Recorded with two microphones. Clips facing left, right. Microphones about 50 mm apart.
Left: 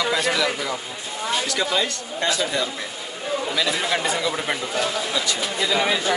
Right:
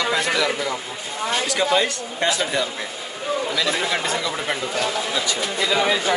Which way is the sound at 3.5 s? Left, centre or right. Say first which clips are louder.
Right 1 dB; centre.